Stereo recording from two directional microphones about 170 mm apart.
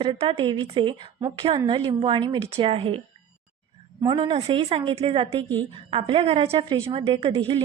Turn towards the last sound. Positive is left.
turn(degrees=-35)  # may be behind; listen again after turning